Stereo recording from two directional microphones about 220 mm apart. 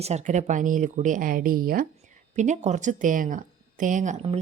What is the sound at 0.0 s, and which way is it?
A woman's voice, 30° right (ahead or behind).